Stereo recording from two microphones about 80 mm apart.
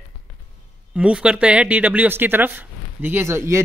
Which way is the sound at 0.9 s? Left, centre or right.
Centre.